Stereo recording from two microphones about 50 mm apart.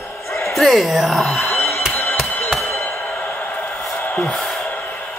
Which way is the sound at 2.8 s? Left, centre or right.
Left.